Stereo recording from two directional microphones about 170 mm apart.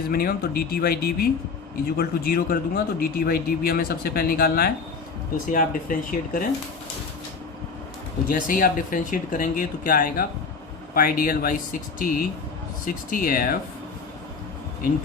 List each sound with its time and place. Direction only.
0.1 s speech: 60° left (ahead or behind)
8.3 s speech: 55° left (ahead or behind)